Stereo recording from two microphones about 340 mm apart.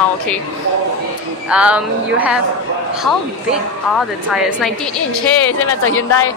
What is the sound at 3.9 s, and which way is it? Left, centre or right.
Speech, centre.